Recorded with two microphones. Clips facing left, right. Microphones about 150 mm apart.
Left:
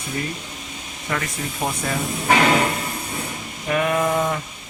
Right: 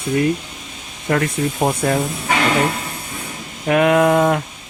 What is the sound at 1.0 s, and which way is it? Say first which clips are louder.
Speech: right 9 dB; 45° right (ahead or behind).